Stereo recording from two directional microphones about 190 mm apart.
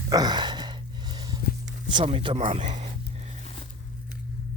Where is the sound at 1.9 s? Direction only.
30° right (ahead or behind).